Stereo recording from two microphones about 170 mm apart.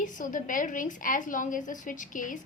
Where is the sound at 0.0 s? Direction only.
50° left (ahead or behind).